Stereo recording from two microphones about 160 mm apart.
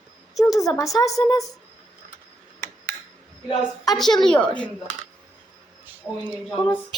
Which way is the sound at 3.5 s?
25° left (ahead or behind).